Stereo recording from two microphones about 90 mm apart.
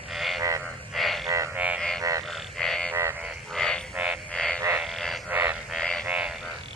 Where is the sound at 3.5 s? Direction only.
5° left (ahead or behind).